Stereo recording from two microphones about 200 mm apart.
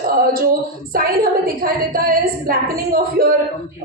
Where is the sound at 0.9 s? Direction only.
45° right (ahead or behind).